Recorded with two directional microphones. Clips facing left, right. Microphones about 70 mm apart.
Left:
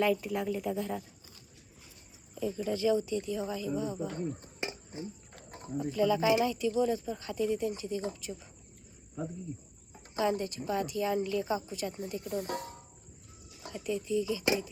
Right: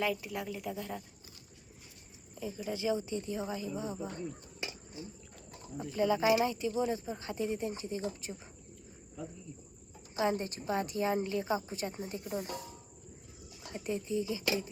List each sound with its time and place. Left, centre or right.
0.0 s a woman's voice: centre
2.4 s speech: centre
3.9 s a sound: left
5.9 s speech: right
10.2 s speech: right
12.4 s speech: left
13.7 s speech: right